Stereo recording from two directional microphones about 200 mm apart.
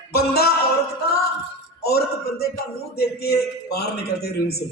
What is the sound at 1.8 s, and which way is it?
A man's voice, 50° left (ahead or behind).